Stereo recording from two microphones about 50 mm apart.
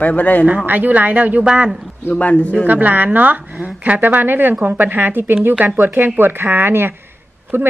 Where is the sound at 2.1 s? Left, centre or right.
Left.